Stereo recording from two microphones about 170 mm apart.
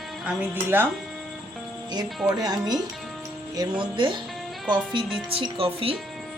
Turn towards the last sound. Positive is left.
turn(degrees=-30)  # may be behind; listen again after turning